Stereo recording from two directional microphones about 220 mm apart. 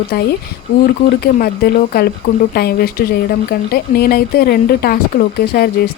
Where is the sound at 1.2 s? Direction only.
45° left (ahead or behind).